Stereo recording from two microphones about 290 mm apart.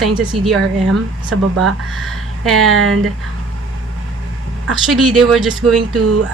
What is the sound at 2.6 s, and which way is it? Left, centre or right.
Speech, right.